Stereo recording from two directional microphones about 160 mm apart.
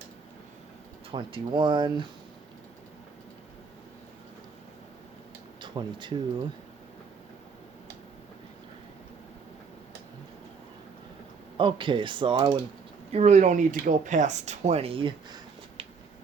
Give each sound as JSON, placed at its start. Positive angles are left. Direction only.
{"t": 1.1, "sound": "speech", "side_deg": -30}
{"t": 5.5, "sound": "speech", "side_deg": -30}
{"t": 11.5, "sound": "speech", "side_deg": -30}
{"t": 13.1, "sound": "speech", "side_deg": -45}